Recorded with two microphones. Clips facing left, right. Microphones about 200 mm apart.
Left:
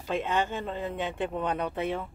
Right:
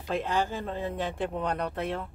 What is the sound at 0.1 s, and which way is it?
Speech, centre (ahead or behind).